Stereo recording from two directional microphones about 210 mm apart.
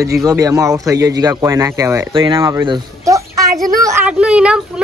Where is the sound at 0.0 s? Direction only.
15° right (ahead or behind).